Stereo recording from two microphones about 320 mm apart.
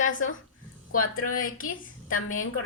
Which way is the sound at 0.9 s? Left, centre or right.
Left.